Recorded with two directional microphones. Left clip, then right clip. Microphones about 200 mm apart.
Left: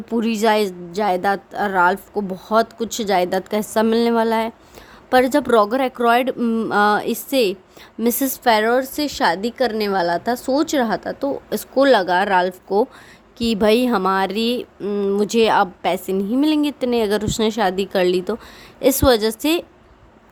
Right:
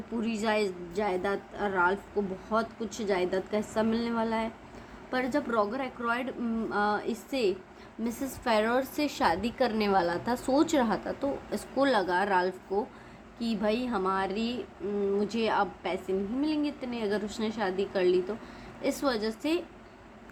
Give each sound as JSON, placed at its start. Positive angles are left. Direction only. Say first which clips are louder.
{"t": 0.2, "sound": "speech", "louder": "left 12 dB", "side_deg": 60}
{"t": 8.4, "sound": "a woman's voice", "louder": "left 11 dB", "side_deg": 40}
{"t": 13.4, "sound": "speech", "louder": "left 14 dB", "side_deg": 60}